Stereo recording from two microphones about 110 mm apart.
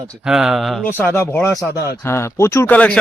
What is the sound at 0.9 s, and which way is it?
Speech, 15° left (ahead or behind).